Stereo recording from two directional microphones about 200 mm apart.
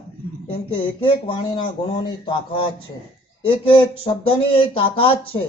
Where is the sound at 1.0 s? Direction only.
25° left (ahead or behind).